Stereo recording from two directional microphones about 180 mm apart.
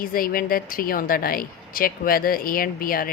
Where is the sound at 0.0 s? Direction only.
55° left (ahead or behind).